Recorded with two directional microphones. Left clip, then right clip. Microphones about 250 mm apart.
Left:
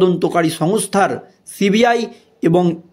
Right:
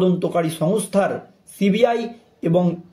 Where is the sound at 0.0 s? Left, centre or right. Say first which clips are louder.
Left 5 dB; left.